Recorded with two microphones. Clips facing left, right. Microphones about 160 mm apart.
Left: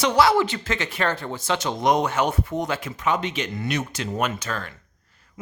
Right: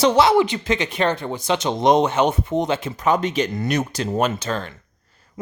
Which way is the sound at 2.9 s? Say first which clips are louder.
Right 6 dB; 40° right (ahead or behind).